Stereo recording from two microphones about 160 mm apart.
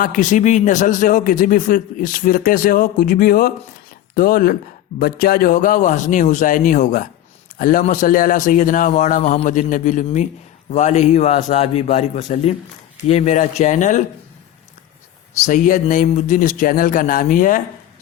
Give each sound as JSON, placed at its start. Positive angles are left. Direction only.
{"t": 0.0, "sound": "a man's voice", "side_deg": 55}
{"t": 15.4, "sound": "speech", "side_deg": 55}